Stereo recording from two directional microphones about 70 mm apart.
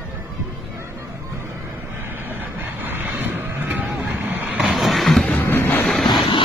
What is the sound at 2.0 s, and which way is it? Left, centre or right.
Vehicle, right.